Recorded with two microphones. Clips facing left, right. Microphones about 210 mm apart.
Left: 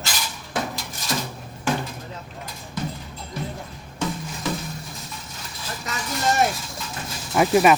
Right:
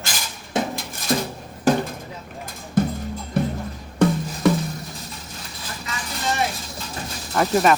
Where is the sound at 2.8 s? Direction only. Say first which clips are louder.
Right 10 dB; 50° right (ahead or behind).